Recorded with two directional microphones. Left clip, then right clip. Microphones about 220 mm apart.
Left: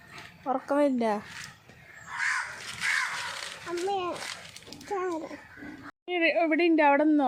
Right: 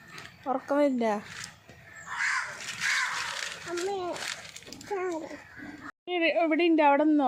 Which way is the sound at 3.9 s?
20° left (ahead or behind).